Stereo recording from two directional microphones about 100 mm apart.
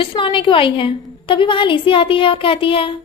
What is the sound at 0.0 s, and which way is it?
A woman's voice, 55° left (ahead or behind).